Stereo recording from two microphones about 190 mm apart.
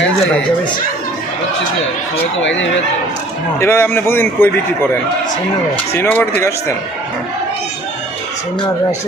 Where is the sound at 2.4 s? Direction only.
80° left.